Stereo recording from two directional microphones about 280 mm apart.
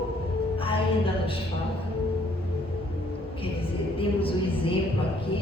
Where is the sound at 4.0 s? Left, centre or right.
Centre.